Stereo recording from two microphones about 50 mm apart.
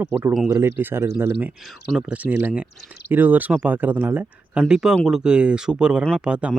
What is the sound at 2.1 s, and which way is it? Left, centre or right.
Speech, right.